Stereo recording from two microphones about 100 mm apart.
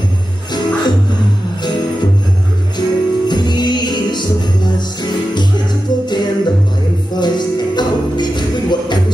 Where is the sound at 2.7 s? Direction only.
45° left (ahead or behind).